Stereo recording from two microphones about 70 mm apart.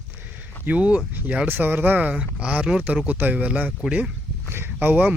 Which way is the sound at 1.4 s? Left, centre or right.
Right.